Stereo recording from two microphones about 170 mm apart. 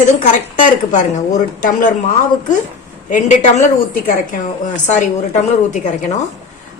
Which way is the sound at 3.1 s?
45° left (ahead or behind).